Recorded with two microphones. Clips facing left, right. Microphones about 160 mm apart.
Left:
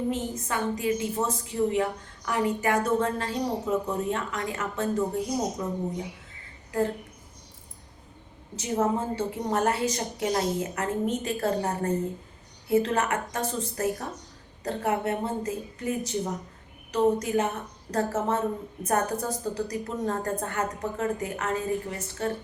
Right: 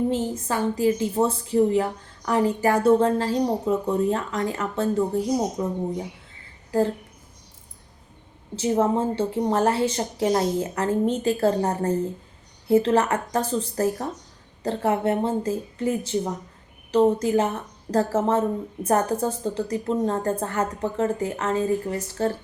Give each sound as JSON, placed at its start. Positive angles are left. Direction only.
{"t": 0.1, "sound": "a woman's voice", "side_deg": -30}
{"t": 8.5, "sound": "a woman's voice", "side_deg": -30}